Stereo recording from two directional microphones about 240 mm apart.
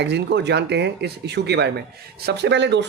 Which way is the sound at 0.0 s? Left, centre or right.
Right.